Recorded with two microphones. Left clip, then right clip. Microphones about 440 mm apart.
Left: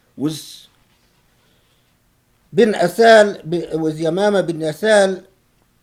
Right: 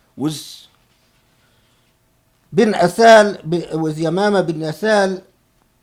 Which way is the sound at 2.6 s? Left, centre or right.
Right.